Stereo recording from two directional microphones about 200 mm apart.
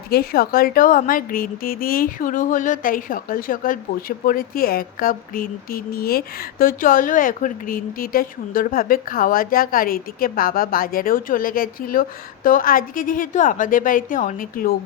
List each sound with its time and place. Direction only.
0.1 s speech: 50° left (ahead or behind)